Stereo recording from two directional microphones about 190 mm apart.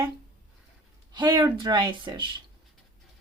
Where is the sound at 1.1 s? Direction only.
25° right (ahead or behind).